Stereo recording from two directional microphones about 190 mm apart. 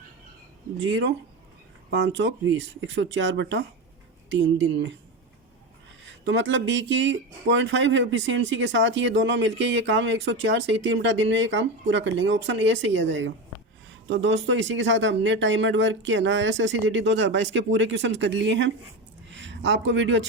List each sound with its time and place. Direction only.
0.9 s speech: 70° right (ahead or behind)
6.1 s a man's voice: 70° right (ahead or behind)